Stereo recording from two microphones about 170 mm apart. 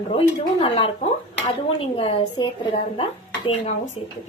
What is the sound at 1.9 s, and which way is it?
Speech, 30° left (ahead or behind).